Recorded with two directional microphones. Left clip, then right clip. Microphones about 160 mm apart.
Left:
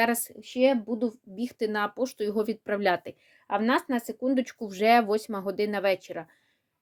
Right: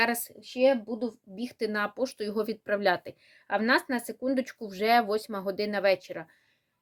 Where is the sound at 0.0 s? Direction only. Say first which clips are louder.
Left 1 dB; 35° left (ahead or behind).